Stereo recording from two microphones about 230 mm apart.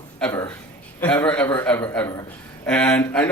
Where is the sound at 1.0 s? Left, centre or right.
Centre.